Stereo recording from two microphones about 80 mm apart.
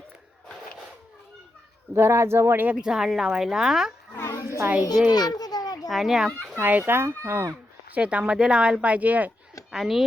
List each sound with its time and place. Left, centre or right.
2.0 s speech: right
2.8 s speech: centre
4.1 s a sound: left
5.1 s children playing: left
5.9 s a child's voice: centre
6.6 s speech: right
7.9 s speech: centre
9.7 s a child's voice: centre